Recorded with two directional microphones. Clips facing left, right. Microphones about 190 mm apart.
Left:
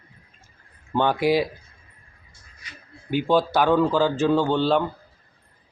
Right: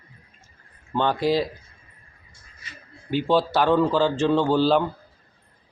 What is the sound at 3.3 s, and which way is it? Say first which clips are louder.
Speech: even; centre (ahead or behind).